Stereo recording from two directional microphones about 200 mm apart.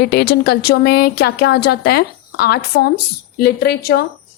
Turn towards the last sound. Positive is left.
turn(degrees=50)  # may be behind; listen again after turning